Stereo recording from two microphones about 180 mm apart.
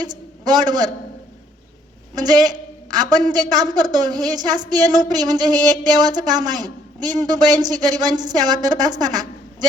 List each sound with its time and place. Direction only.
0.0 s a sound: 25° right (ahead or behind)
0.7 s a man's voice: 25° right (ahead or behind)
2.1 s a man's voice: 25° right (ahead or behind)